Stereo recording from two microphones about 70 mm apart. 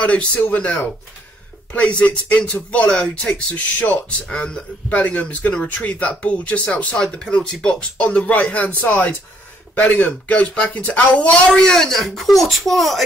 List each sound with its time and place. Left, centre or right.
0.0 s speech: centre